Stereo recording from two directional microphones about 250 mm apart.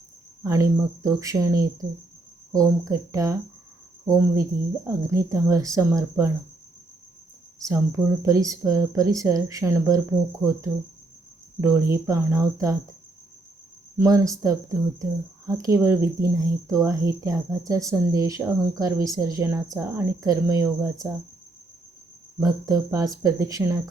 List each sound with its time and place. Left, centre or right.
0.4 s speech: centre
7.6 s speech: centre
11.6 s speech: centre
14.0 s speech: centre
22.4 s speech: centre